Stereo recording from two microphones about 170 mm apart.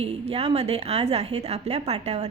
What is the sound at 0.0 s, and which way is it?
A woman's voice, 35° right (ahead or behind).